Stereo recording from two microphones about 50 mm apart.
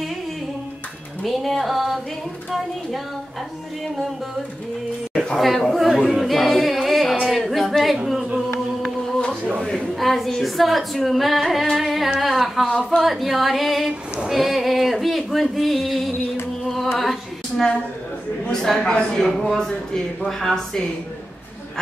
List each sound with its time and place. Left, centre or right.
1.2 s a sound: centre
5.1 s a sound: centre
5.4 s a sound: centre
6.0 s singing: centre
9.9 s singing: centre
11.7 s carnatic music: centre
12.2 s speech: centre
12.6 s a man's voice: centre
13.0 s a sound: centre
16.6 s music: centre
17.0 s female singing: centre
18.5 s a man's voice: centre
19.7 s speech: left
20.2 s a man's voice: centre